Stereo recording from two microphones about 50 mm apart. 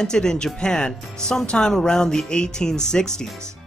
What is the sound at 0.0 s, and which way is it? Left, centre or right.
Speech, centre.